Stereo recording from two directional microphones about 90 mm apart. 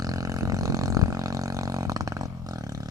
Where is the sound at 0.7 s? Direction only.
40° right (ahead or behind).